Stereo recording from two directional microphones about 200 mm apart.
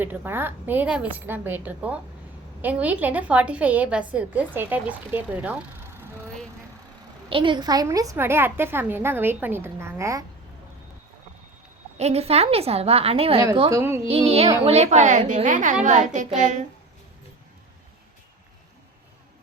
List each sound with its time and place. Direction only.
0.0 s a woman's voice: 10° right (ahead or behind)
7.3 s a woman's voice: 25° right (ahead or behind)
11.9 s a woman's voice: 30° right (ahead or behind)
13.7 s a woman's voice: 15° right (ahead or behind)
14.1 s a woman's voice: 30° right (ahead or behind)